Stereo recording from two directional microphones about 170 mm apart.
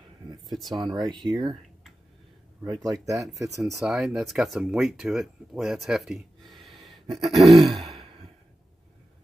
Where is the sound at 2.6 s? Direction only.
20° right (ahead or behind).